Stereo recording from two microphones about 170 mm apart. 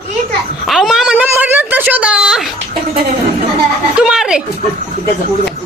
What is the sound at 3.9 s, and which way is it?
Speech, 5° right (ahead or behind).